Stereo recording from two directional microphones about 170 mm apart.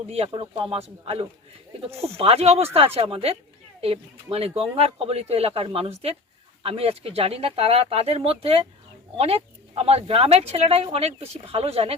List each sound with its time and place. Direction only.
0.1 s speech: 35° right (ahead or behind)